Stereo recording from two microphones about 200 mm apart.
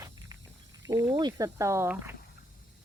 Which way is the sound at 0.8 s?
15° right (ahead or behind).